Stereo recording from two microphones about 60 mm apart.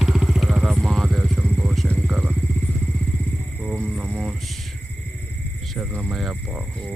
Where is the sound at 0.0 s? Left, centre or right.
Centre.